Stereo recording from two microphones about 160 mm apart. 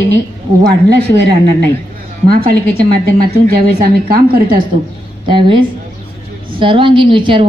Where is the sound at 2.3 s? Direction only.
70° right (ahead or behind).